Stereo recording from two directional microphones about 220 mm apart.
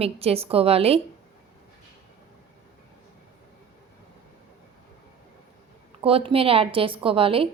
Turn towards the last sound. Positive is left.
turn(degrees=-25)  # may be behind; listen again after turning